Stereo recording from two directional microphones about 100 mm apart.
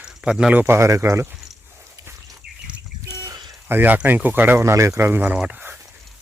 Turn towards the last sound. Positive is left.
turn(degrees=-20)  # may be behind; listen again after turning